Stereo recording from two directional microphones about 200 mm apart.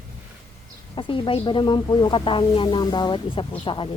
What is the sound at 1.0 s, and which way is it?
Speech, 25° left (ahead or behind).